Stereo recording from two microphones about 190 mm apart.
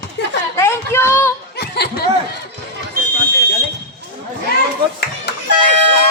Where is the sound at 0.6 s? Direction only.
15° left (ahead or behind).